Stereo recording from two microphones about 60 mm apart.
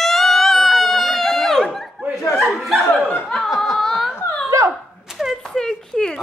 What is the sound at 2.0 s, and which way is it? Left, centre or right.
Chuckle, right.